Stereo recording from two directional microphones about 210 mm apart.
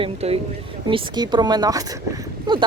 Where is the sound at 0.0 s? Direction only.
30° right (ahead or behind).